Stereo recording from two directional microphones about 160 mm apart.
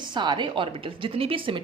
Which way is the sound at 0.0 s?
30° right (ahead or behind).